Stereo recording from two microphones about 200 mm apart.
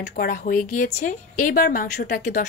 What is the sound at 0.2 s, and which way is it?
A woman's voice, 45° left (ahead or behind).